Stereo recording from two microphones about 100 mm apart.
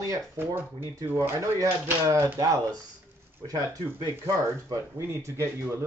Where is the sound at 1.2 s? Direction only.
35° right (ahead or behind).